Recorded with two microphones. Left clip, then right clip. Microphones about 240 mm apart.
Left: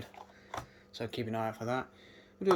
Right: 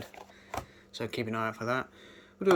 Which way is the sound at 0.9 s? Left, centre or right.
Centre.